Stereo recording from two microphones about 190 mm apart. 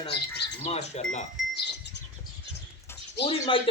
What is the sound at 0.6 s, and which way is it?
Speech, 35° left (ahead or behind).